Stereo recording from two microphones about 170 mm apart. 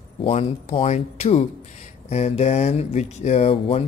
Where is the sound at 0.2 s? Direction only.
35° left (ahead or behind).